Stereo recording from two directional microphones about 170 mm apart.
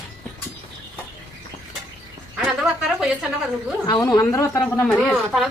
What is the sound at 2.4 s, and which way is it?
Speech, 5° right (ahead or behind).